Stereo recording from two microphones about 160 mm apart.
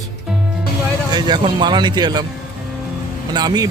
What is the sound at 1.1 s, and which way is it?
A man's voice, 25° right (ahead or behind).